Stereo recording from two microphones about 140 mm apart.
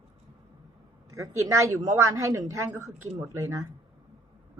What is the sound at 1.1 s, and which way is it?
A woman's voice, 25° right (ahead or behind).